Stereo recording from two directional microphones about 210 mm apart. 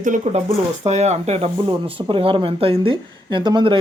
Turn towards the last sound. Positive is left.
turn(degrees=-20)  # may be behind; listen again after turning